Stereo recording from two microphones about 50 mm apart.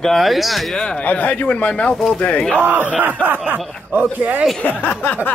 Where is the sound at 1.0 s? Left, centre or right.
Left.